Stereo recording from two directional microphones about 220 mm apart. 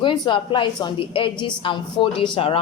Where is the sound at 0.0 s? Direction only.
20° left (ahead or behind).